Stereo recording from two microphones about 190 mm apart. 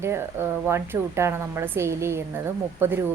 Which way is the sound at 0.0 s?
15° right (ahead or behind).